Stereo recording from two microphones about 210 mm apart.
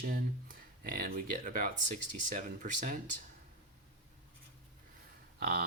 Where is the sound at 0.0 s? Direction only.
45° right (ahead or behind).